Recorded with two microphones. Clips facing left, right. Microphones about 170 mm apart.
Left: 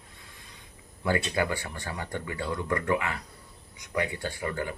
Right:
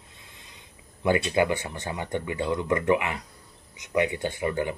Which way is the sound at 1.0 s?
20° right (ahead or behind).